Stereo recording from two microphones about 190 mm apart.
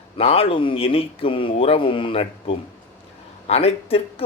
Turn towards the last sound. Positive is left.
turn(degrees=30)  # may be behind; listen again after turning